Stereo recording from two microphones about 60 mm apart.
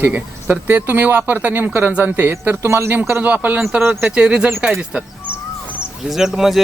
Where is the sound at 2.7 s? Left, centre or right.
Right.